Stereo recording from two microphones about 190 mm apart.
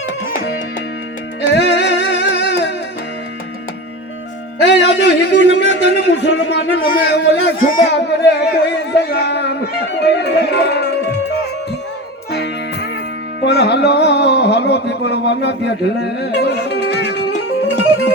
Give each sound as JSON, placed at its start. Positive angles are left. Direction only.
{"t": 1.4, "sound": "music", "side_deg": 65}
{"t": 4.6, "sound": "a man's voice", "side_deg": 65}
{"t": 12.3, "sound": "music", "side_deg": 60}